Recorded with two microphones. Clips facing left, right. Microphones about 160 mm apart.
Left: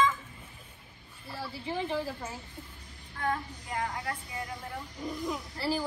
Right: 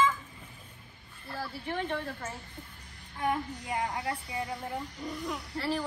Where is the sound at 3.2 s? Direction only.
15° right (ahead or behind).